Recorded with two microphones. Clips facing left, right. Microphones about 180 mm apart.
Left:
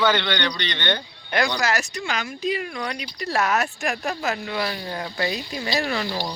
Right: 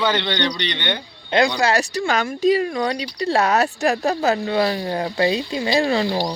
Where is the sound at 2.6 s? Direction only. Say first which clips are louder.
Right 8 dB; 30° right (ahead or behind).